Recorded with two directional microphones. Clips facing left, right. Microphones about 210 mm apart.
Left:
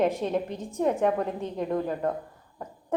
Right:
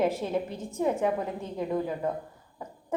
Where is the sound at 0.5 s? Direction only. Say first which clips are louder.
Left 2 dB; 15° left (ahead or behind).